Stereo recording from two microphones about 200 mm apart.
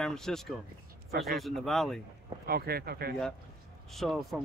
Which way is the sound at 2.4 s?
50° right (ahead or behind).